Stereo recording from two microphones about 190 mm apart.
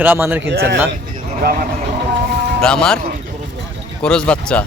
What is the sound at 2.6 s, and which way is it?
Speech, 5° left (ahead or behind).